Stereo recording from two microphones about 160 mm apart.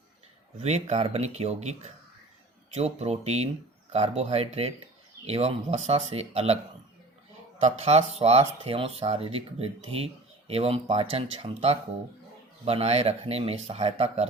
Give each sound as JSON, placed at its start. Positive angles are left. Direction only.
{"t": 0.6, "sound": "speech", "side_deg": -45}
{"t": 7.6, "sound": "speech", "side_deg": -40}